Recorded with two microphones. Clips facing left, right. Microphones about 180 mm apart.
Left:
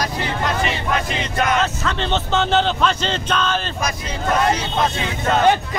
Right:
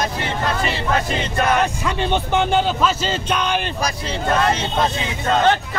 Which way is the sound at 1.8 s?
10° right (ahead or behind).